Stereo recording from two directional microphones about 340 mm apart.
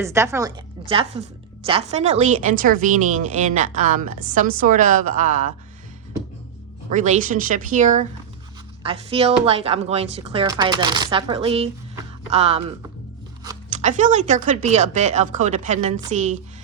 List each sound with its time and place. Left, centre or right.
0.0 s a woman's voice: centre
6.9 s a woman's voice: right